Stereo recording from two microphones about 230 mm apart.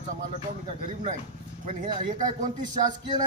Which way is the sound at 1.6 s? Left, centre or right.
Right.